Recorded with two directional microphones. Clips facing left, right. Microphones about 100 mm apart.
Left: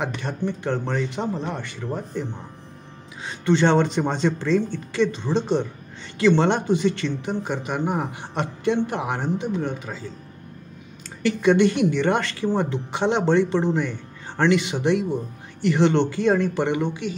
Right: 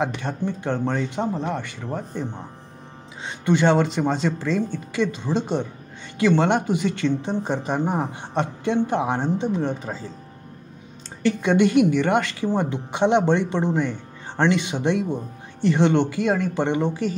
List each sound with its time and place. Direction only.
0.0 s speech: 20° right (ahead or behind)
3.3 s a woman's voice: 15° right (ahead or behind); by 10.0 s 35° right (ahead or behind)
11.2 s a woman's voice: 15° right (ahead or behind)
16.5 s a woman's voice: 25° right (ahead or behind)